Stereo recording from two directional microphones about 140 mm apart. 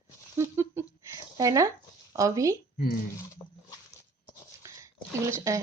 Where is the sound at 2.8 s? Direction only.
90° left.